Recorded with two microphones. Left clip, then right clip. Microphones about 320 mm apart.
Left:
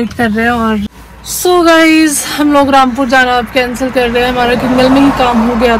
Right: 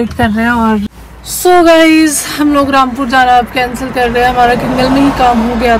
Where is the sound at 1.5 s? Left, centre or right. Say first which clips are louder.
Right 1 dB; centre.